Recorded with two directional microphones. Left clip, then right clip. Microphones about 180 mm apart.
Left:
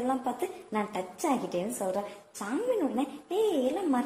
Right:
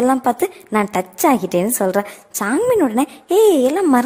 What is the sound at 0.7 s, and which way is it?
A woman's voice, 40° right (ahead or behind).